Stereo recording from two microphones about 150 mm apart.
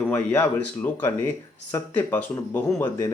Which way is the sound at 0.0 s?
15° left (ahead or behind).